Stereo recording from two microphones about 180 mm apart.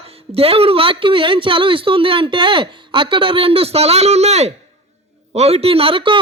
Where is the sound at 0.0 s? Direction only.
35° right (ahead or behind).